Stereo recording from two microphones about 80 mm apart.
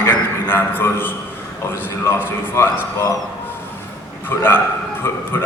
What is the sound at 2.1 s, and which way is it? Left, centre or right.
Speech, left.